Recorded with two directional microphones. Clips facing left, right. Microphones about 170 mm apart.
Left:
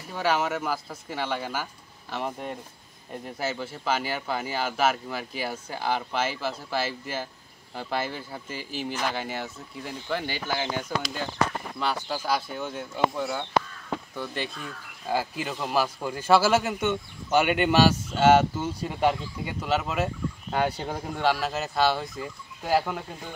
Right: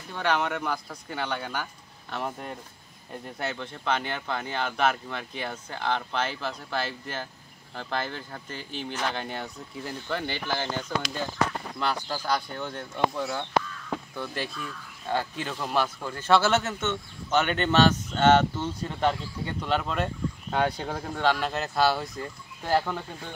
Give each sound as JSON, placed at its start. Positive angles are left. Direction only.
{"t": 0.1, "sound": "speech", "side_deg": 5}
{"t": 14.5, "sound": "speech", "side_deg": 40}
{"t": 15.0, "sound": "speech", "side_deg": 5}